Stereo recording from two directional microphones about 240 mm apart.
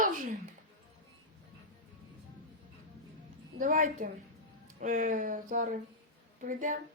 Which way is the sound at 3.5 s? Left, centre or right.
Right.